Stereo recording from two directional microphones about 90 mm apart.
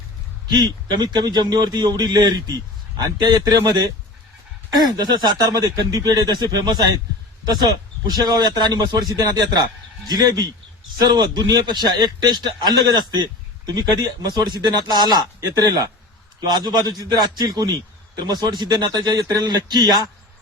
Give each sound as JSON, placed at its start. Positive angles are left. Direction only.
{"t": 0.5, "sound": "a man's voice", "side_deg": -55}
{"t": 4.7, "sound": "a man's voice", "side_deg": -50}
{"t": 5.5, "sound": "a man's voice", "side_deg": -40}